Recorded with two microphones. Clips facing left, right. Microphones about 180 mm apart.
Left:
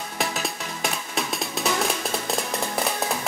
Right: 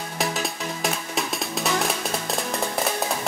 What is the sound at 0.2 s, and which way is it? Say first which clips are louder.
Music: right 2 dB; centre (ahead or behind).